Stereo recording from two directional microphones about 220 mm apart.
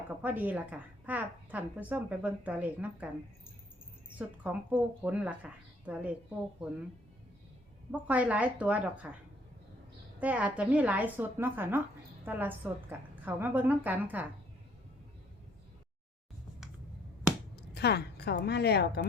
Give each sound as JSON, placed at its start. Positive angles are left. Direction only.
{"t": 0.2, "sound": "a woman's voice", "side_deg": -5}
{"t": 4.2, "sound": "a woman's voice", "side_deg": -5}
{"t": 7.9, "sound": "a woman's voice", "side_deg": -5}
{"t": 10.2, "sound": "a woman's voice", "side_deg": -5}
{"t": 17.6, "sound": "a woman's voice", "side_deg": 50}